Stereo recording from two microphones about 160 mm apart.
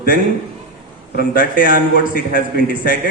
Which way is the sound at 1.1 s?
65° left (ahead or behind).